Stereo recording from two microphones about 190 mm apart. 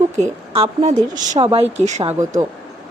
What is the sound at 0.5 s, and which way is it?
Speech, 30° right (ahead or behind).